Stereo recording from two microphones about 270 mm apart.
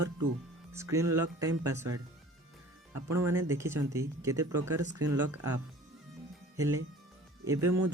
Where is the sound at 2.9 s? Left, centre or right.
Right.